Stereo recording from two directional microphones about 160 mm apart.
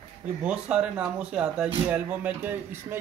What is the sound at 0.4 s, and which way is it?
Speech, 5° right (ahead or behind).